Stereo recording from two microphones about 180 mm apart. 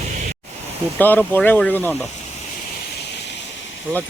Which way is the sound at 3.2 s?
75° left (ahead or behind).